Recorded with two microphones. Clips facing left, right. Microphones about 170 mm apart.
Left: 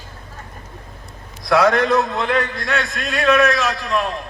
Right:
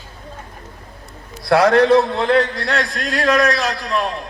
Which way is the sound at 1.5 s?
30° right (ahead or behind).